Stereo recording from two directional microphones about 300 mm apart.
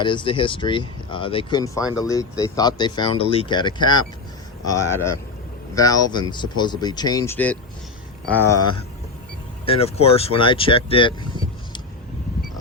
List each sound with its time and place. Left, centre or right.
0.0 s speech: centre
9.6 s speech: centre